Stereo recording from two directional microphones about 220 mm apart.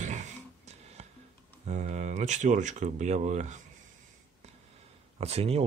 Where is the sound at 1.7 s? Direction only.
35° right (ahead or behind).